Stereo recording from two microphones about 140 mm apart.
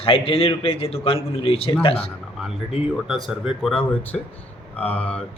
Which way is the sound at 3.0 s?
5° right (ahead or behind).